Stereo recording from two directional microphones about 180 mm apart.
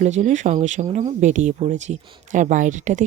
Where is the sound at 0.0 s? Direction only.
40° right (ahead or behind).